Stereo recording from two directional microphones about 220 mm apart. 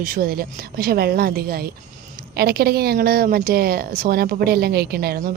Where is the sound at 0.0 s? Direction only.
40° right (ahead or behind).